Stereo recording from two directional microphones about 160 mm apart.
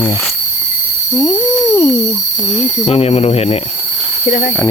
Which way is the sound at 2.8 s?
40° left (ahead or behind).